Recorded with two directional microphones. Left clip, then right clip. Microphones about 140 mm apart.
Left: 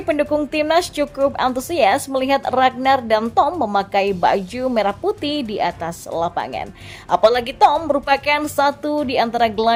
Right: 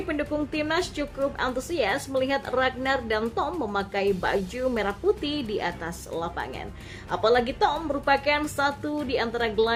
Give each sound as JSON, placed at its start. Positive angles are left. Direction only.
{"t": 0.1, "sound": "a woman's voice", "side_deg": 55}